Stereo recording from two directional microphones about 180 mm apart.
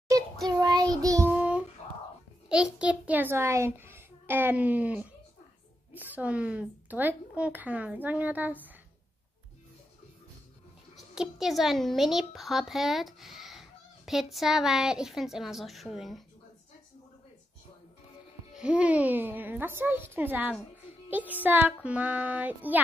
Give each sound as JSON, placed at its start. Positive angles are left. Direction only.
{"t": 0.6, "sound": "child singing", "side_deg": -20}
{"t": 1.3, "sound": "child singing", "side_deg": -5}
{"t": 2.5, "sound": "a woman's voice", "side_deg": -5}
{"t": 11.0, "sound": "a child's voice", "side_deg": 0}
{"t": 18.5, "sound": "a woman's voice", "side_deg": -5}